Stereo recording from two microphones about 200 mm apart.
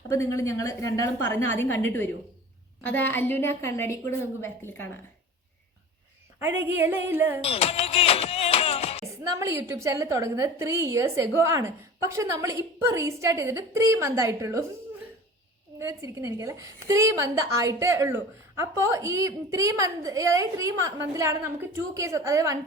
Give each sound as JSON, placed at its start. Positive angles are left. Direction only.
{"t": 0.1, "sound": "a woman's voice", "side_deg": 15}
{"t": 6.6, "sound": "a woman's voice", "side_deg": -10}
{"t": 7.4, "sound": "music", "side_deg": 30}
{"t": 9.2, "sound": "a woman's voice", "side_deg": -15}
{"t": 15.8, "sound": "a woman's voice", "side_deg": -15}